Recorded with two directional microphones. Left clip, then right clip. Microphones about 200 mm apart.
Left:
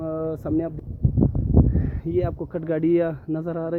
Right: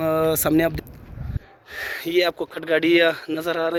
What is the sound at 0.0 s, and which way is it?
Vehicle, 5° right (ahead or behind).